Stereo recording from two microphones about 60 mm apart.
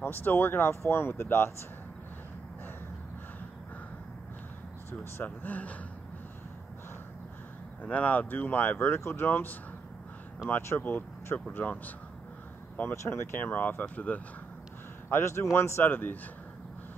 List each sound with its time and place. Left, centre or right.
0.0 s speech: left
5.2 s speech: left
7.8 s speech: left
10.4 s speech: centre
10.8 s speech: left
12.9 s speech: left
13.5 s speech: left
15.0 s speech: left
15.9 s speech: left